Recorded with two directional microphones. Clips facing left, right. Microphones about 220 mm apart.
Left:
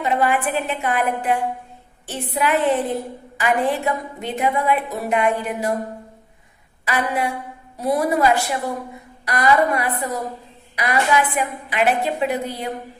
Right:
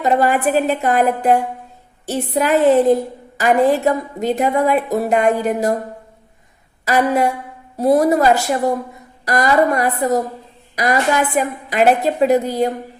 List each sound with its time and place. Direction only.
0.0 s a woman's voice: 40° right (ahead or behind)
6.8 s a woman's voice: 40° right (ahead or behind)